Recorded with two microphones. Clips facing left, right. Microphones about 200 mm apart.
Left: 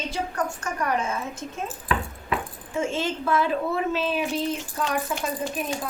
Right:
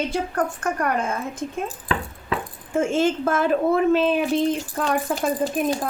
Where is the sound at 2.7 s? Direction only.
50° right (ahead or behind).